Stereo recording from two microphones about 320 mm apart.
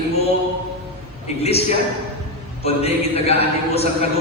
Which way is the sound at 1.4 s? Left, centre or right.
Centre.